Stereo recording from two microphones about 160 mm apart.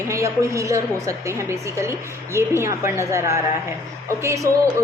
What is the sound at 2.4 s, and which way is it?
A woman's voice, 15° right (ahead or behind).